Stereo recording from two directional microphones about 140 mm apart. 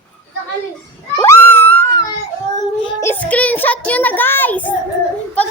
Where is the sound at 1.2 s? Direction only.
15° left (ahead or behind).